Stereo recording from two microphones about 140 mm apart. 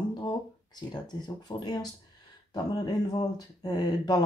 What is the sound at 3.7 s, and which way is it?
Speech, 30° left (ahead or behind).